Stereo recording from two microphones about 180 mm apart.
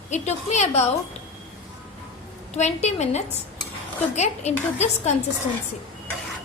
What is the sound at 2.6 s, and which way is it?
A woman's voice, 40° left (ahead or behind).